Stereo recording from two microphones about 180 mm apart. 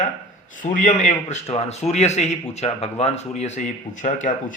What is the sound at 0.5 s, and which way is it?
Speech, 45° left (ahead or behind).